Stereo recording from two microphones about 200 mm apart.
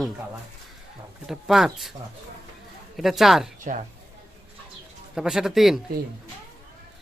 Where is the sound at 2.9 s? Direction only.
Centre (ahead or behind).